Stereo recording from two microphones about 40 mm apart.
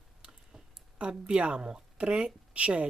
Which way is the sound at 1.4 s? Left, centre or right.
Right.